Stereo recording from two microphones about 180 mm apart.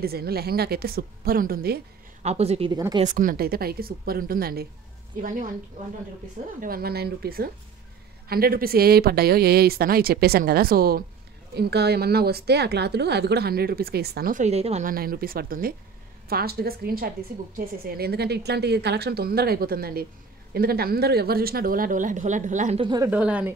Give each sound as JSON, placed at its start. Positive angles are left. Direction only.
{"t": 0.0, "sound": "a woman's voice", "side_deg": -60}
{"t": 2.2, "sound": "speech", "side_deg": -35}
{"t": 2.7, "sound": "speech", "side_deg": -25}
{"t": 3.1, "sound": "a woman's voice", "side_deg": -50}
{"t": 6.6, "sound": "a woman's voice", "side_deg": -55}
{"t": 14.9, "sound": "a woman's voice", "side_deg": -55}
{"t": 22.8, "sound": "speech", "side_deg": -25}
{"t": 23.0, "sound": "speech", "side_deg": -5}